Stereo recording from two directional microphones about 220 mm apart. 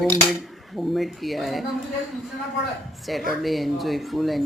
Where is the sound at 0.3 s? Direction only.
Centre (ahead or behind).